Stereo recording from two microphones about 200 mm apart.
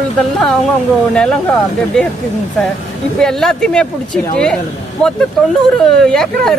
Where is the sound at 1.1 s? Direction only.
5° left (ahead or behind).